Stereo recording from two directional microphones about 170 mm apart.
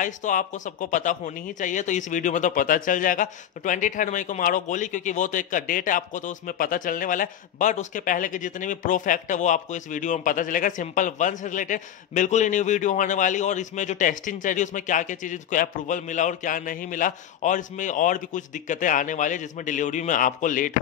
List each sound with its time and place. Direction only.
0.0 s speech: 50° left (ahead or behind)